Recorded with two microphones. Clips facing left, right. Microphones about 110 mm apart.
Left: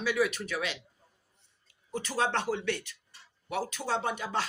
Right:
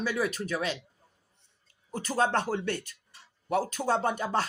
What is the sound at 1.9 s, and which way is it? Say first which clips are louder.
Speech: right 3 dB; 45° right (ahead or behind).